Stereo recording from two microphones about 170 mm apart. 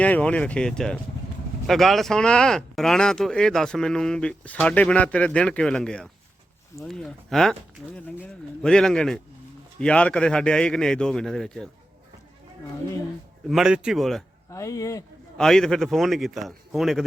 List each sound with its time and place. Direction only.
0.0 s speech: 5° left (ahead or behind)
13.5 s speech: 5° right (ahead or behind)
14.5 s speech: 20° left (ahead or behind)
15.4 s speech: 5° left (ahead or behind)